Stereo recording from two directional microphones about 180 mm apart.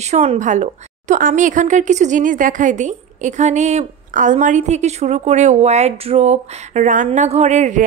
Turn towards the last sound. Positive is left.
turn(degrees=-40)  # may be behind; listen again after turning